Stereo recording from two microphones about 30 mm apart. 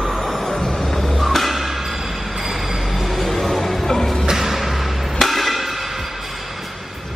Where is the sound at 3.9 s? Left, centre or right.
Centre.